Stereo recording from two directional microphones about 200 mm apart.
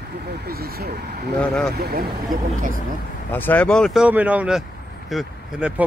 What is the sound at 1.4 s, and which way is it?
Speech, 5° left (ahead or behind).